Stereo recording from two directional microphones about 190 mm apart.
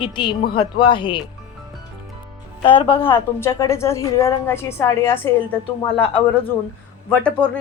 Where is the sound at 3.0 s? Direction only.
10° left (ahead or behind).